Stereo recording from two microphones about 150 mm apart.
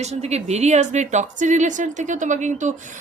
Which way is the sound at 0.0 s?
45° right (ahead or behind).